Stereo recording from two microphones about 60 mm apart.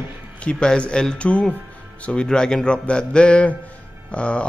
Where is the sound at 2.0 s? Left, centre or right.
Centre.